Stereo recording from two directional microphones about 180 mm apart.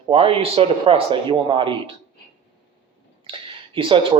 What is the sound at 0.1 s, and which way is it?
Speech, 30° right (ahead or behind).